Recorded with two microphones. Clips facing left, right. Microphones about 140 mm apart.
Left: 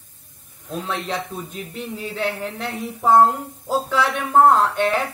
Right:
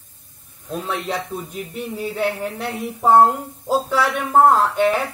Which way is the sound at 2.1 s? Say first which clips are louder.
Right 2 dB; 10° right (ahead or behind).